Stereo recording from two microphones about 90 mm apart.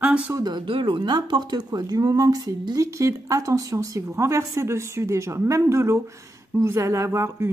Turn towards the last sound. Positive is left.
turn(degrees=-30)  # may be behind; listen again after turning